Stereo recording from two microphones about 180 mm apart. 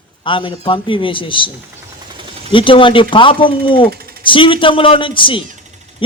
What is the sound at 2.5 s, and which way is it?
Speech, 30° left (ahead or behind).